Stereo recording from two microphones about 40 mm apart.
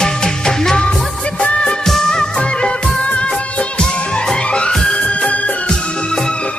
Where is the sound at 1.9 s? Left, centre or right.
Centre.